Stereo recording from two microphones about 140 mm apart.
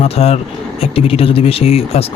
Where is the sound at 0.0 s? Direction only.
45° left (ahead or behind).